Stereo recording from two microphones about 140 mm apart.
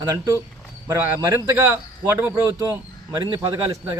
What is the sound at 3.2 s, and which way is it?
Speech, 30° right (ahead or behind).